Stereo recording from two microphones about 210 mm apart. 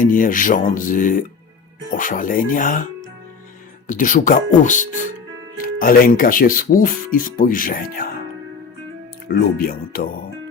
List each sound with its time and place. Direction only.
0.0 s speech: 40° left (ahead or behind)
3.8 s speech: 40° left (ahead or behind)
9.3 s speech: 45° left (ahead or behind)